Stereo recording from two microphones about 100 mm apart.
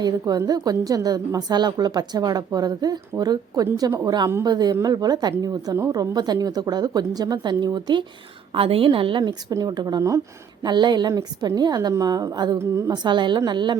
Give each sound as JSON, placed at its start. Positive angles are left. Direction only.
{"t": 0.0, "sound": "a woman's voice", "side_deg": -40}
{"t": 8.5, "sound": "a woman's voice", "side_deg": -70}
{"t": 9.2, "sound": "a woman's voice", "side_deg": -40}
{"t": 10.6, "sound": "a woman's voice", "side_deg": -50}